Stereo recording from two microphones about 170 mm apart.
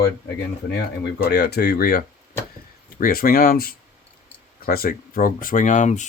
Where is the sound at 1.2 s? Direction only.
70° left (ahead or behind).